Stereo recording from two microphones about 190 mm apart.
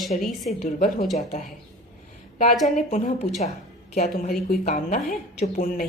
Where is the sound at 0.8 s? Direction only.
50° left (ahead or behind).